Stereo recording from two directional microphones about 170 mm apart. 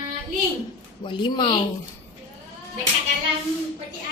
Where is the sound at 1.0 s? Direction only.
25° left (ahead or behind).